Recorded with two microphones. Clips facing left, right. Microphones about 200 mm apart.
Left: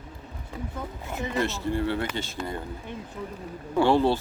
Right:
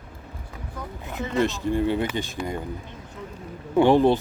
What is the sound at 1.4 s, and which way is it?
Speech, 15° right (ahead or behind).